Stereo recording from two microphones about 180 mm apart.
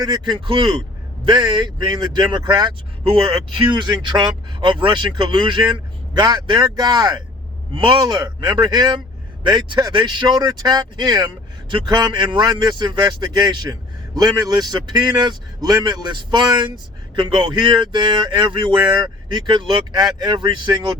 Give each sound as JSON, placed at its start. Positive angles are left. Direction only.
{"t": 0.0, "sound": "a man's voice", "side_deg": -25}